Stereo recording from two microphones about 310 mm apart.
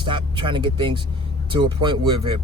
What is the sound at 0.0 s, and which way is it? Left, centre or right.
Speech, centre.